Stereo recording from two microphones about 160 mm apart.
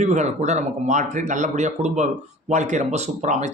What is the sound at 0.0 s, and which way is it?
Speech, 45° right (ahead or behind).